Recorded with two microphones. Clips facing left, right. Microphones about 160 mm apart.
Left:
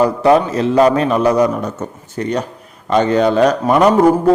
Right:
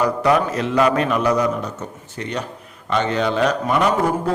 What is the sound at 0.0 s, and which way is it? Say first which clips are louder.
Speech: left 6 dB; 30° left (ahead or behind).